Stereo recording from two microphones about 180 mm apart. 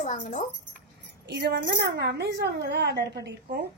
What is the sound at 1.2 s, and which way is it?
A woman's voice, 65° right (ahead or behind).